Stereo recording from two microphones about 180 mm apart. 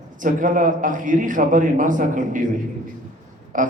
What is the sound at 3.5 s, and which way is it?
Speech, 45° right (ahead or behind).